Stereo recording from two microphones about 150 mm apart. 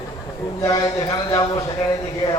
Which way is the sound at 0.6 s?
20° left (ahead or behind).